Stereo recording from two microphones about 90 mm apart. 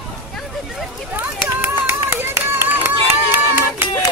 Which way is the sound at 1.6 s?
25° right (ahead or behind).